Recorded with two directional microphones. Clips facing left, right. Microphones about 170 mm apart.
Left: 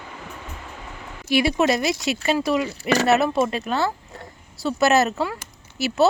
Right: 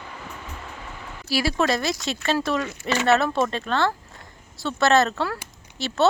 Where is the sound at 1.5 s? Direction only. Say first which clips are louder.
Left 3 dB; 20° left (ahead or behind).